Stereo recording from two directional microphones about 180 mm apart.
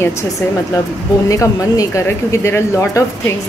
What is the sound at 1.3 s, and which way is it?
Speech, 20° left (ahead or behind).